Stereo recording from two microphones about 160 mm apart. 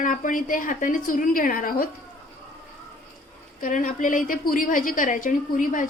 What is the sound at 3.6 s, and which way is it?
A woman's voice, 55° left (ahead or behind).